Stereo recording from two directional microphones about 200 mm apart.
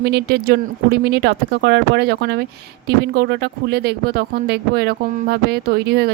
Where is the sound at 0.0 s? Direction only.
55° right (ahead or behind).